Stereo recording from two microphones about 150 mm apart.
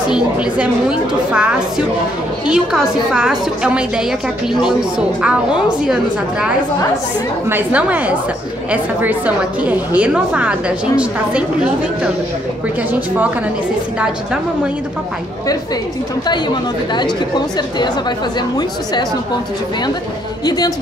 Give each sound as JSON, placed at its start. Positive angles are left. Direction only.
{"t": 0.1, "sound": "a woman's voice", "side_deg": -5}
{"t": 7.4, "sound": "a woman's voice", "side_deg": -10}
{"t": 17.6, "sound": "speech", "side_deg": 30}
{"t": 20.4, "sound": "speech", "side_deg": 25}